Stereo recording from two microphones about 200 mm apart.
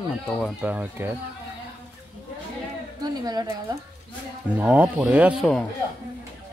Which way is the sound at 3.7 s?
20° right (ahead or behind).